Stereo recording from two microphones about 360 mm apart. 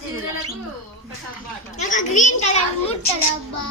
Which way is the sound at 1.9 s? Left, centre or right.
Centre.